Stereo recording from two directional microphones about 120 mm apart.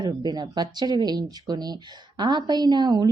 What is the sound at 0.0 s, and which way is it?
Speech, 35° right (ahead or behind).